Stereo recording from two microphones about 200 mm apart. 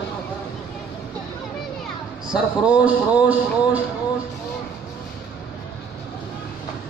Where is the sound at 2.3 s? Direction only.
10° right (ahead or behind).